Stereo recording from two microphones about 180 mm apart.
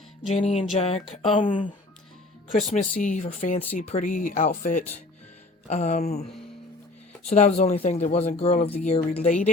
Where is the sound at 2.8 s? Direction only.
45° left (ahead or behind).